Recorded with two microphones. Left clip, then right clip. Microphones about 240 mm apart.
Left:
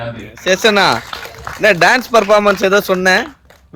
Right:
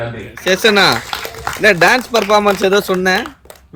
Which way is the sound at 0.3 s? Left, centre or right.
Centre.